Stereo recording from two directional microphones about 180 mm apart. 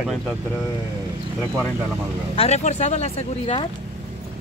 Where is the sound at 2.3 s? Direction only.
35° left (ahead or behind).